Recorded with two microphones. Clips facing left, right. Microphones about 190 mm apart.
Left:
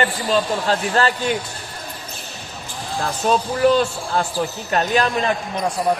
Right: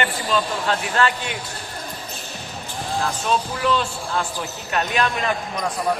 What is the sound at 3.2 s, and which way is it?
A man's voice, 40° left (ahead or behind).